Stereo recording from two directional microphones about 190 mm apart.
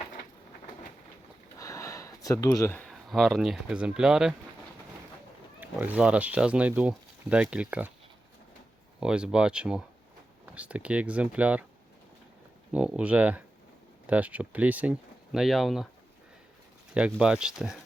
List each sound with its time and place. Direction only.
1.5 s a sound: 15° left (ahead or behind)
2.9 s speech: centre (ahead or behind)
5.5 s speech: 10° right (ahead or behind)
9.0 s speech: 5° right (ahead or behind)
12.7 s speech: 5° right (ahead or behind)
16.9 s speech: 5° right (ahead or behind)